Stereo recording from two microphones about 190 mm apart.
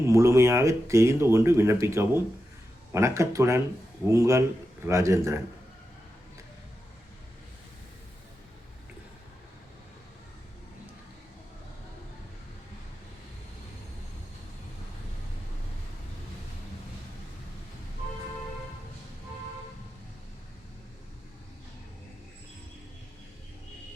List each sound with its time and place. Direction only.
0.0 s speech: 15° right (ahead or behind)